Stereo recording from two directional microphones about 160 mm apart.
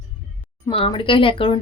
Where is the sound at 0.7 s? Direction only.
35° left (ahead or behind).